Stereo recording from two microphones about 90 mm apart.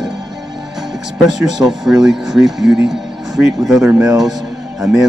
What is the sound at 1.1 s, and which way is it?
Speech, 5° right (ahead or behind).